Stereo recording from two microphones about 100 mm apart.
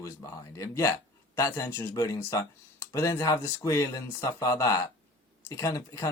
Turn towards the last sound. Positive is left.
turn(degrees=30)  # may be behind; listen again after turning